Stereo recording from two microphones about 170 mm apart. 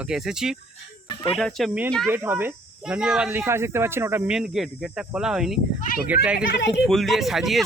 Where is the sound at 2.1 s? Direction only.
15° right (ahead or behind).